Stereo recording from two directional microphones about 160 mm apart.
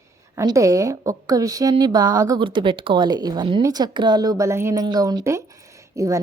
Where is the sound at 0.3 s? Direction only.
20° right (ahead or behind).